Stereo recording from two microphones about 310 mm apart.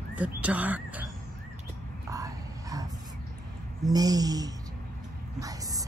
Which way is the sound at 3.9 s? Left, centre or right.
Centre.